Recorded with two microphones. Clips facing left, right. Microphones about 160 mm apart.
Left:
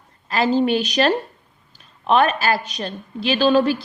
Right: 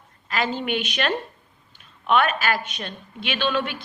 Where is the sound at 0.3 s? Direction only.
35° left (ahead or behind).